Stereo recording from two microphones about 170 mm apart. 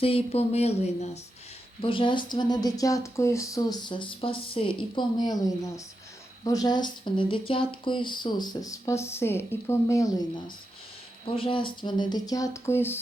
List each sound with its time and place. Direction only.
0.0 s speech: 35° left (ahead or behind); by 13.0 s 15° left (ahead or behind)